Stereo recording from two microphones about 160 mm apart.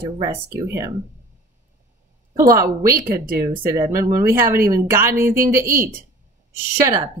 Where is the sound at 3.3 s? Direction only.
15° right (ahead or behind).